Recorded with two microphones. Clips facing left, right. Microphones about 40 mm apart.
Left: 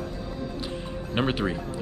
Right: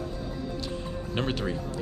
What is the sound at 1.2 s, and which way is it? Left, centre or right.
Speech, centre.